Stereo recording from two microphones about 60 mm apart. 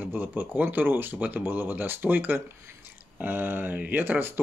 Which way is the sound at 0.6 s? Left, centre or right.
Right.